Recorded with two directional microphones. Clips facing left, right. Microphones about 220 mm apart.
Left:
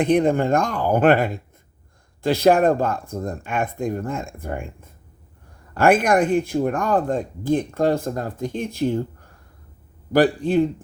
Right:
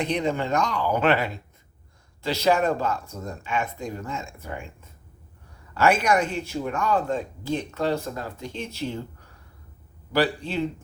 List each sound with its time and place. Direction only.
0.0 s speech: 50° left (ahead or behind)